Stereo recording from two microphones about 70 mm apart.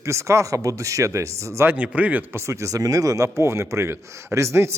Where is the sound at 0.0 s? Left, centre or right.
Right.